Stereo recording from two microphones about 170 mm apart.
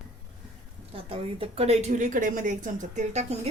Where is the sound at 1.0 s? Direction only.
35° right (ahead or behind).